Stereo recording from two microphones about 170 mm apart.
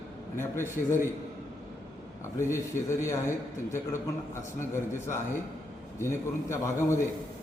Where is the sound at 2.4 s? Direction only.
15° left (ahead or behind).